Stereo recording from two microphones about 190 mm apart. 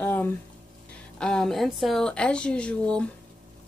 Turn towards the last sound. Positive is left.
turn(degrees=5)  # may be behind; listen again after turning